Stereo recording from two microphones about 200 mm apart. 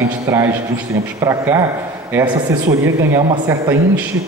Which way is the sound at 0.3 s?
15° right (ahead or behind).